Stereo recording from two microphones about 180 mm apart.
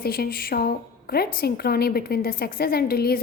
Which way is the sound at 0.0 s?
55° left (ahead or behind).